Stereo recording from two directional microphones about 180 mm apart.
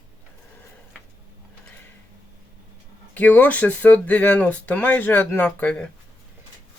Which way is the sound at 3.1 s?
10° left (ahead or behind).